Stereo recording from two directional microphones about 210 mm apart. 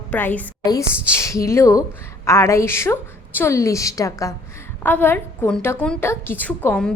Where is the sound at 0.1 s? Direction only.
10° left (ahead or behind).